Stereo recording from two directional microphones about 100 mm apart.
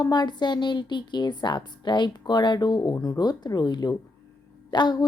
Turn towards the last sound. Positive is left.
turn(degrees=45)  # may be behind; listen again after turning